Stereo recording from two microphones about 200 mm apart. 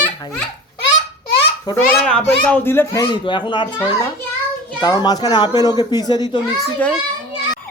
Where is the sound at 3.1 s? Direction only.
25° left (ahead or behind).